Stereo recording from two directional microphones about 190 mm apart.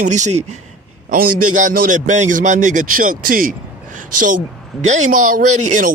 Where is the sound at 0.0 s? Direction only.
40° right (ahead or behind).